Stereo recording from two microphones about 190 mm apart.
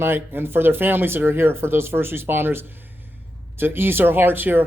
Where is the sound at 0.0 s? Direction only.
10° right (ahead or behind).